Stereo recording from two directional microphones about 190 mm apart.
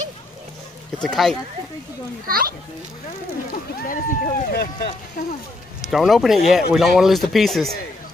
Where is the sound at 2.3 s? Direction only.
50° right (ahead or behind).